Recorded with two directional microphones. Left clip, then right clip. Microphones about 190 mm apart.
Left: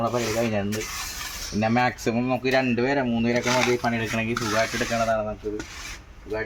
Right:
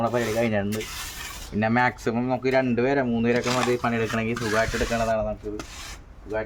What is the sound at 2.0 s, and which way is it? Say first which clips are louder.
Speech: left 1 dB; 5° left (ahead or behind).